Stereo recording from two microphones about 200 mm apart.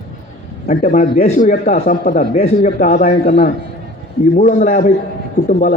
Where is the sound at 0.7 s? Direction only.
40° left (ahead or behind).